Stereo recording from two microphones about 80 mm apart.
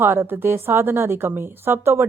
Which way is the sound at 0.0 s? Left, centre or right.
Right.